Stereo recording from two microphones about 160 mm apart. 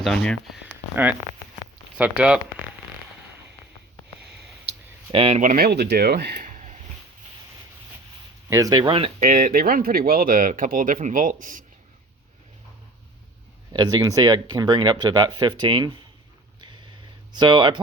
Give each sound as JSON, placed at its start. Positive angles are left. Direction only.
{"t": 0.0, "sound": "speech", "side_deg": 5}
{"t": 5.1, "sound": "speech", "side_deg": -40}
{"t": 8.4, "sound": "speech", "side_deg": -20}
{"t": 9.2, "sound": "speech", "side_deg": -60}
{"t": 13.7, "sound": "speech", "side_deg": -25}
{"t": 17.3, "sound": "speech", "side_deg": -30}